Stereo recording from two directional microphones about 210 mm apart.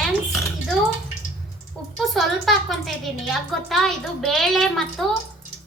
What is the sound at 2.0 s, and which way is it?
A woman's voice, centre (ahead or behind).